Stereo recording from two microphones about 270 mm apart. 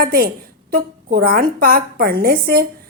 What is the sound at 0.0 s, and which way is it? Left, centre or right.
A woman's voice, right.